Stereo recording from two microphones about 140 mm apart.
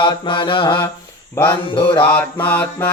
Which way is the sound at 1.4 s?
20° left (ahead or behind).